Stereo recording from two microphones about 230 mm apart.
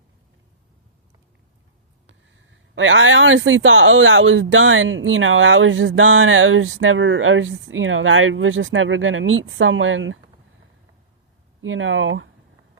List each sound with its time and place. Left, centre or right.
2.0 s speech: right
11.6 s speech: right